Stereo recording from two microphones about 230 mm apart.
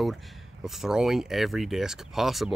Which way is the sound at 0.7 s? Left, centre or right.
Centre.